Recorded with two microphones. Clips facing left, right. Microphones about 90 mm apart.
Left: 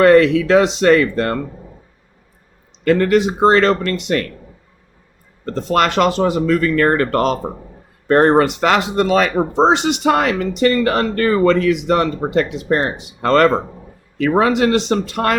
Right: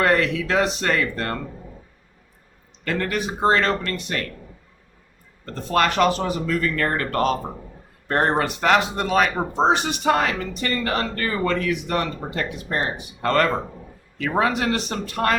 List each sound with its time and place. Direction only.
0.0 s speech: 90° left
2.8 s speech: 60° left (ahead or behind); by 4.2 s 75° left (ahead or behind)
5.5 s speech: 90° left; by 7.3 s 75° left (ahead or behind)
8.0 s speech: 90° left; by 11.0 s 70° left (ahead or behind)
11.1 s speech: 50° left (ahead or behind)
11.4 s speech: 80° left